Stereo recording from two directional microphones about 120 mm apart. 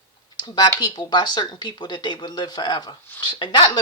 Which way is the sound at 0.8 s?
35° left (ahead or behind).